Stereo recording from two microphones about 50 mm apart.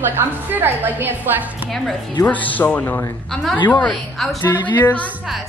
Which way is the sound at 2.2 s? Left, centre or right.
Left.